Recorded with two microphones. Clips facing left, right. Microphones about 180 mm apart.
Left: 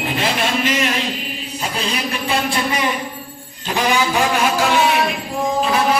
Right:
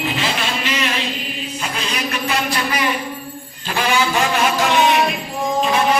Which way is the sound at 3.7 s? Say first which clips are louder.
Left 1 dB; 15° left (ahead or behind).